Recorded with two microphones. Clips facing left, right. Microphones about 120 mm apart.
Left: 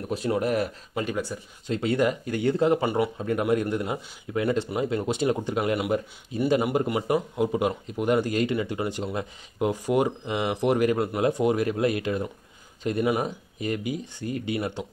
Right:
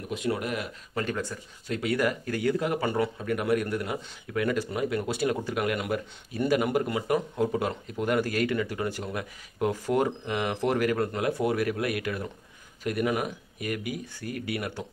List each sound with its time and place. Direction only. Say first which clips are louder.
0.1 s speech: left 5 dB; 35° left (ahead or behind)
0.9 s speech: left 2 dB; 15° left (ahead or behind)
1.7 s speech: left 3 dB; 25° left (ahead or behind)
2.8 s speech: left 2 dB; 15° left (ahead or behind)